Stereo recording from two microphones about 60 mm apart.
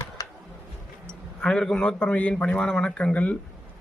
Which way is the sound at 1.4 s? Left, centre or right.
Centre.